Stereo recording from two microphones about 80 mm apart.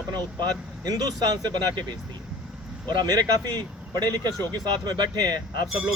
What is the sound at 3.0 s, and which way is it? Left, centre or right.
Speech, right.